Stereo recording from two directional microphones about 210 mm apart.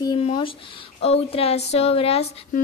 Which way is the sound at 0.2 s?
25° left (ahead or behind).